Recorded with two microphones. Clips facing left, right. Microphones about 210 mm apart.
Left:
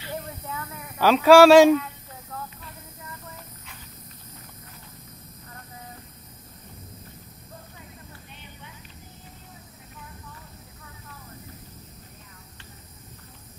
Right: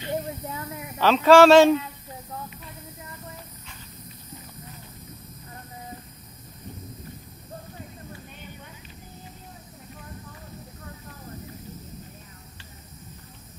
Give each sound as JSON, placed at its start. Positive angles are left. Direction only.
{"t": 0.0, "sound": "snake", "side_deg": -25}
{"t": 0.9, "sound": "speech", "side_deg": 10}